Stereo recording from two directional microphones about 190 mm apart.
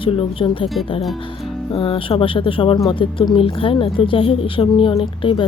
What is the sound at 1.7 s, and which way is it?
Speech, 25° left (ahead or behind).